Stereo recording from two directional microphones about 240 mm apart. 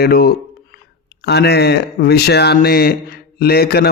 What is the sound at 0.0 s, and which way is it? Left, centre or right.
Speech, left.